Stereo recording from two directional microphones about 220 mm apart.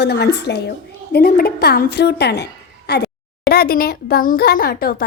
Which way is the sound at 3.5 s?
45° left (ahead or behind).